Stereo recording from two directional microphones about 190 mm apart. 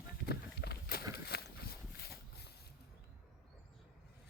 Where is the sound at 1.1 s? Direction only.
60° left (ahead or behind).